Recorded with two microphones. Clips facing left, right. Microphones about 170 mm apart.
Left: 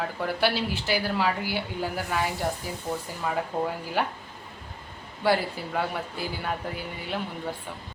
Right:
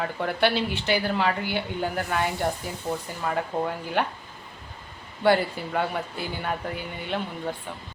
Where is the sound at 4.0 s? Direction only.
5° left (ahead or behind).